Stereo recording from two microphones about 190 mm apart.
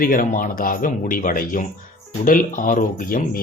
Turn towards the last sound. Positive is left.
turn(degrees=45)  # may be behind; listen again after turning